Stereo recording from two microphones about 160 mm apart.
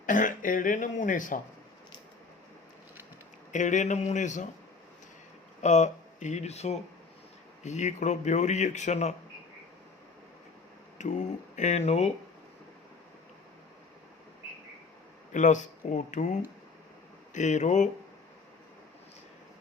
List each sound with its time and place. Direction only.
0.0 s speech: 55° left (ahead or behind)
3.5 s speech: 50° left (ahead or behind)
5.6 s speech: 45° left (ahead or behind)
10.9 s speech: 50° left (ahead or behind)
15.3 s speech: 50° left (ahead or behind)